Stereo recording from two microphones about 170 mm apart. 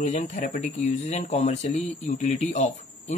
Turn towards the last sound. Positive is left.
turn(degrees=45)  # may be behind; listen again after turning